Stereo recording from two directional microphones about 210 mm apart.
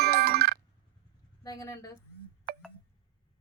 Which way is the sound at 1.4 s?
20° left (ahead or behind).